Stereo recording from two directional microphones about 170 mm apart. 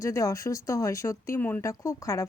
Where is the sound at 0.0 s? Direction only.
20° left (ahead or behind).